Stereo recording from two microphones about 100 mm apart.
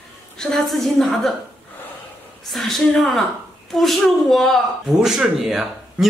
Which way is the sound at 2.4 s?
Centre (ahead or behind).